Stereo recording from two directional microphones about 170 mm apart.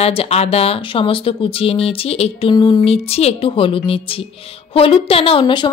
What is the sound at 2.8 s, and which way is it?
Speech, 35° left (ahead or behind).